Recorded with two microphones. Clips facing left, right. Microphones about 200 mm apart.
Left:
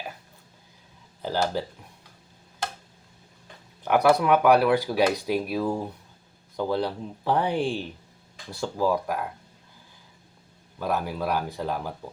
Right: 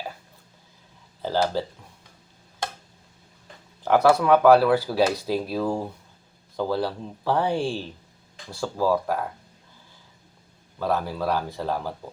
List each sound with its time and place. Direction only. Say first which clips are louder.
1.2 s speech: right 2 dB; 15° left (ahead or behind)
3.8 s speech: right 2 dB; 15° left (ahead or behind)
6.6 s speech: right 1 dB; 20° left (ahead or behind)
10.8 s speech: right 2 dB; 15° left (ahead or behind)